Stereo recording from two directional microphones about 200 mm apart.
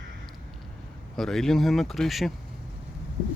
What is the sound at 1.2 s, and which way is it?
Speech, centre (ahead or behind).